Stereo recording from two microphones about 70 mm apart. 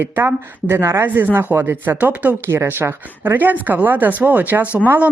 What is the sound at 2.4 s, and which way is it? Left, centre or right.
Speech, right.